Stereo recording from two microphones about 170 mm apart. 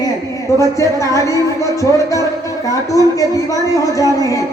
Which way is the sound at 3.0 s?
20° left (ahead or behind).